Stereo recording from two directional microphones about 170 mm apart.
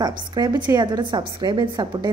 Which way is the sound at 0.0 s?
25° right (ahead or behind).